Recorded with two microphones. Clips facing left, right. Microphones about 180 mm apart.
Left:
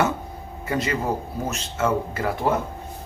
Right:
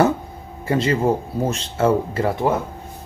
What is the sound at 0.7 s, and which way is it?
Speech, 30° right (ahead or behind).